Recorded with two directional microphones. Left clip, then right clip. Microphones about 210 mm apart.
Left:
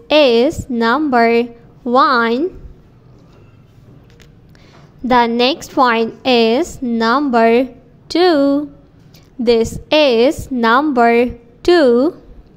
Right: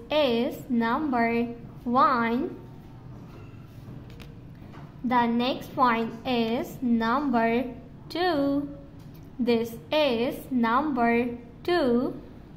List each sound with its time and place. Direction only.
0.1 s a woman's voice: 35° left (ahead or behind)
5.0 s a woman's voice: 35° left (ahead or behind)